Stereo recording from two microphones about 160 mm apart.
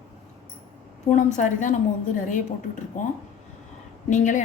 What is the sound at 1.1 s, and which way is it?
Speech, 50° left (ahead or behind).